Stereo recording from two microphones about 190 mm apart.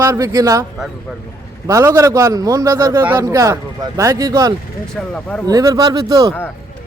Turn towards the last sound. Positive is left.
turn(degrees=10)  # may be behind; listen again after turning